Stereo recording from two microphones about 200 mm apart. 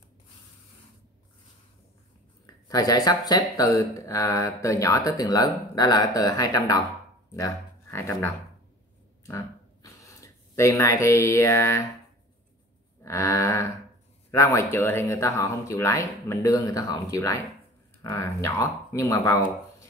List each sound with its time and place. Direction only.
2.4 s speech: 20° left (ahead or behind)
9.3 s a sound: 15° left (ahead or behind)
13.0 s speech: 15° left (ahead or behind)